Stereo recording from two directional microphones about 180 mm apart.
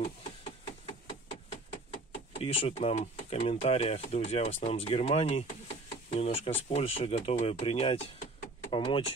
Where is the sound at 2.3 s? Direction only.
30° left (ahead or behind).